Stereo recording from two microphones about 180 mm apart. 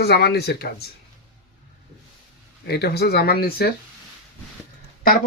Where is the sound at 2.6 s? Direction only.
65° left (ahead or behind).